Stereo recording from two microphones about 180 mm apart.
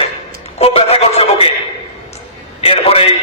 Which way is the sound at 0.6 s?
35° left (ahead or behind).